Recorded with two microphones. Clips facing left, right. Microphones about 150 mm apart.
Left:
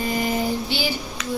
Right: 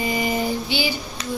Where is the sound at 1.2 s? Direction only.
30° right (ahead or behind).